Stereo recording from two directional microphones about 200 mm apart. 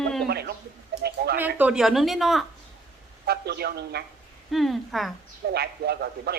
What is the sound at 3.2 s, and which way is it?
Speech, 50° right (ahead or behind).